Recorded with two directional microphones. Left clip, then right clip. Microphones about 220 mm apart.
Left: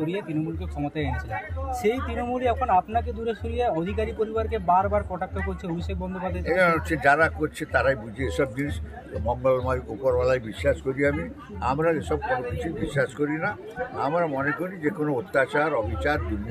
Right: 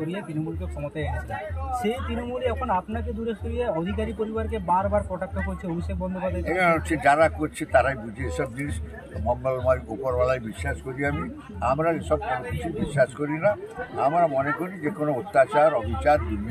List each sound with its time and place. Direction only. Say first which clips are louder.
2.4 s speech: left 4 dB; 45° left (ahead or behind)
6.4 s a man's voice: left 1 dB; 5° left (ahead or behind)